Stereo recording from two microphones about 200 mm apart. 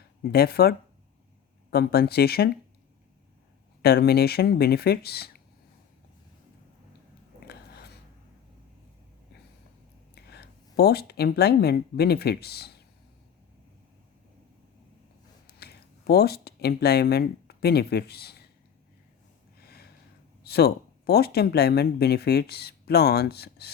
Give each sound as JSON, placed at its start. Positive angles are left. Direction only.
{"t": 0.2, "sound": "speech", "side_deg": 50}
{"t": 3.8, "sound": "speech", "side_deg": 50}
{"t": 7.4, "sound": "a sound", "side_deg": 55}
{"t": 10.2, "sound": "speech", "side_deg": 55}
{"t": 15.4, "sound": "speech", "side_deg": 55}
{"t": 19.5, "sound": "a sound", "side_deg": 50}
{"t": 20.4, "sound": "speech", "side_deg": 50}